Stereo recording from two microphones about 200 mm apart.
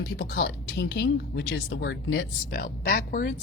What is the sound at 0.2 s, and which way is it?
A woman's voice, 55° left (ahead or behind).